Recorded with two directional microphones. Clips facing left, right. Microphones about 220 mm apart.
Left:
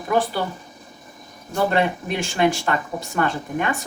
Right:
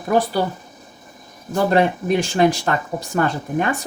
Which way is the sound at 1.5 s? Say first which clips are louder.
Right 3 dB; 40° right (ahead or behind).